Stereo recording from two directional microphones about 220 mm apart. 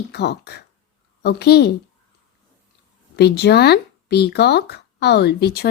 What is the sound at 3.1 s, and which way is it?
Speech, 50° left (ahead or behind).